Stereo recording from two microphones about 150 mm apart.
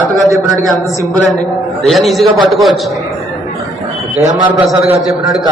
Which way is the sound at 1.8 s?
Centre (ahead or behind).